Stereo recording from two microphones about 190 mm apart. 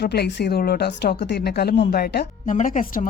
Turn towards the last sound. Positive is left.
turn(degrees=45)  # may be behind; listen again after turning